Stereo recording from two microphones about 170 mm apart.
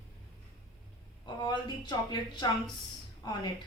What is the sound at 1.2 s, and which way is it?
A woman's voice, 25° left (ahead or behind).